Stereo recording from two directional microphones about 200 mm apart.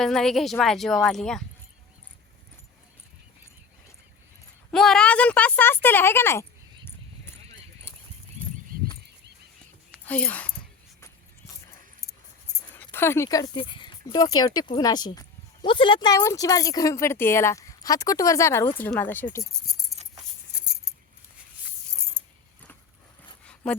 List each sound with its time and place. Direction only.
0.0 s speech: centre (ahead or behind)
4.7 s speech: centre (ahead or behind)
10.1 s speech: 5° left (ahead or behind)
12.7 s speech: 10° left (ahead or behind)
22.2 s mechanisms: 10° right (ahead or behind)
23.6 s speech: 5° left (ahead or behind)